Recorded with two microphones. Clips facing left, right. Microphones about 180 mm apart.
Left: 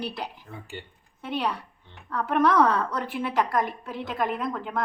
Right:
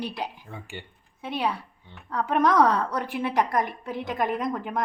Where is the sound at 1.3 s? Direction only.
10° right (ahead or behind).